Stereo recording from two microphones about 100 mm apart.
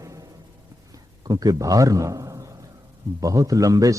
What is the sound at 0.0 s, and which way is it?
Music, 30° right (ahead or behind).